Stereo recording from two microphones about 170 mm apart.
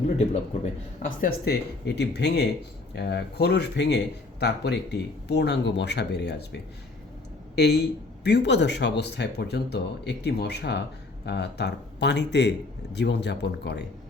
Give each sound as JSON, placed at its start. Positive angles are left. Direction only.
{"t": 1.0, "sound": "speech", "side_deg": 65}